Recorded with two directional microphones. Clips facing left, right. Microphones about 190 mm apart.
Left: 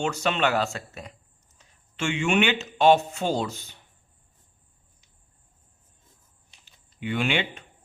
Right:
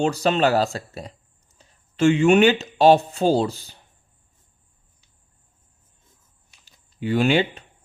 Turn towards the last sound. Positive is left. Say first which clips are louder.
# right 7 dB
turn(degrees=-35)  # may be behind; listen again after turning